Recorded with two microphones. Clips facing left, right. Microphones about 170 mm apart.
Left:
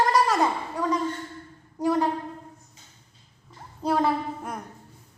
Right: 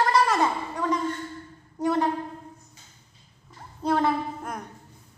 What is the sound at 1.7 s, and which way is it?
Speech, 10° left (ahead or behind).